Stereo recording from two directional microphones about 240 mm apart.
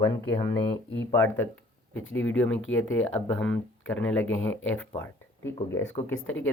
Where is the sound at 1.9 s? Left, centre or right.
Left.